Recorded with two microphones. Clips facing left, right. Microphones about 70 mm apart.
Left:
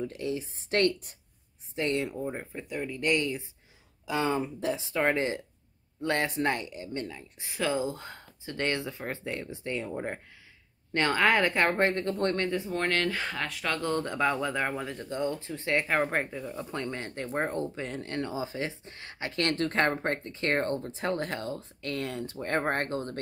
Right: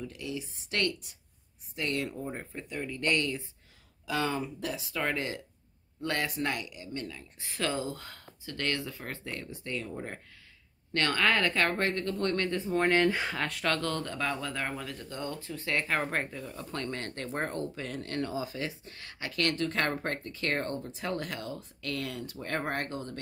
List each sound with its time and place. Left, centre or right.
0.0 s speech: left
1.8 s speech: left
2.2 s speech: centre
7.9 s speech: left
12.6 s speech: centre
13.3 s speech: centre
13.7 s speech: centre
17.6 s speech: left